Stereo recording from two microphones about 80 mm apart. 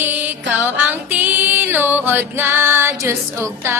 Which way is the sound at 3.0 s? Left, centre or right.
Right.